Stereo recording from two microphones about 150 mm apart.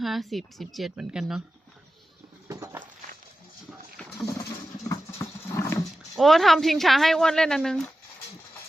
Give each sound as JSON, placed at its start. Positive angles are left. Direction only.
{"t": 0.0, "sound": "speech", "side_deg": 0}
{"t": 2.5, "sound": "a sound", "side_deg": -20}
{"t": 4.3, "sound": "vehicle", "side_deg": 25}
{"t": 6.1, "sound": "speech", "side_deg": 0}